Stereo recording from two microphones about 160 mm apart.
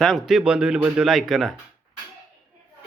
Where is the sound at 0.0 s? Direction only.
Centre (ahead or behind).